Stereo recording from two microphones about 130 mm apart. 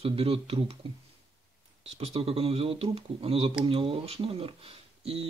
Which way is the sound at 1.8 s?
55° right (ahead or behind).